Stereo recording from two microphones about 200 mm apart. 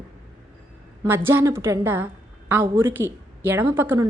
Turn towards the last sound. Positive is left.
turn(degrees=-15)  # may be behind; listen again after turning